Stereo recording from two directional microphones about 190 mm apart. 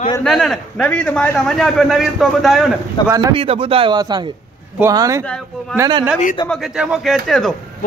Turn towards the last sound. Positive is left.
turn(degrees=0)  # may be behind; listen again after turning